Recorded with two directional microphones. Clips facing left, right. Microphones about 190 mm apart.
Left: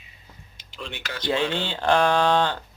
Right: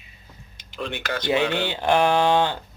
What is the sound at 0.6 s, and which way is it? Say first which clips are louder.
Speech: right 6 dB; 55° right (ahead or behind).